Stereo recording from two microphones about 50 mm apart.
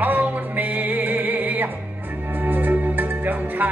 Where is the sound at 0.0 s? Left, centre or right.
Right.